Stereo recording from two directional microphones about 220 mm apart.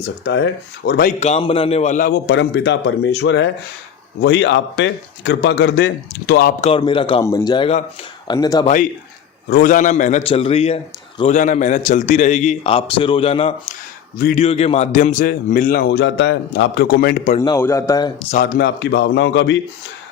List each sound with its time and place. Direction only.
0.0 s speech: 50° left (ahead or behind)
1.2 s speech: 25° left (ahead or behind); by 6.5 s 50° left (ahead or behind)
6.6 s a man's voice: 25° left (ahead or behind)
9.5 s a man's voice: 40° left (ahead or behind)
14.2 s a man's voice: 35° left (ahead or behind)
17.4 s a man's voice: 15° left (ahead or behind)
18.3 s speech: 40° left (ahead or behind)